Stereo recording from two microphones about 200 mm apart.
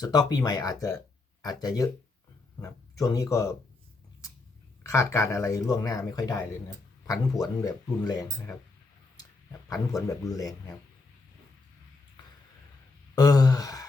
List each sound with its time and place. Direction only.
0.0 s speech: 20° left (ahead or behind)
4.8 s speech: 15° left (ahead or behind)
10.2 s speech: 15° left (ahead or behind)
13.1 s a sound: 20° left (ahead or behind)